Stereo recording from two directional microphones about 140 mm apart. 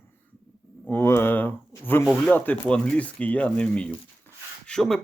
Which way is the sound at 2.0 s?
Centre (ahead or behind).